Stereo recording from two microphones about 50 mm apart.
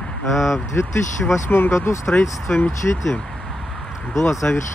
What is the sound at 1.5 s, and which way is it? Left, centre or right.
Speech, left.